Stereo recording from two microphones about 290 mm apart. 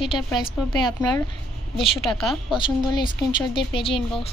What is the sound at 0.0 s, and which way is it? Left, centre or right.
Speech, centre.